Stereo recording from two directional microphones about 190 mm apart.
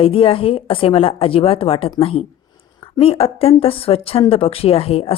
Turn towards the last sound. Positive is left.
turn(degrees=30)  # may be behind; listen again after turning